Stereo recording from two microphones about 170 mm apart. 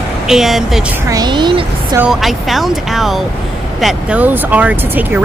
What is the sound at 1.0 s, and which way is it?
Speech, 20° right (ahead or behind).